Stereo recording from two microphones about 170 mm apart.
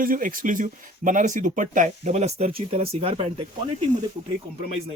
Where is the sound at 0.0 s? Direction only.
55° right (ahead or behind); by 3.4 s 35° right (ahead or behind).